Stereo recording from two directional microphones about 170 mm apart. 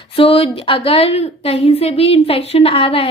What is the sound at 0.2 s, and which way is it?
A woman's voice, 35° left (ahead or behind).